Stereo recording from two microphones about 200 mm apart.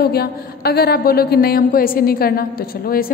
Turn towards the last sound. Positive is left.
turn(degrees=45)  # may be behind; listen again after turning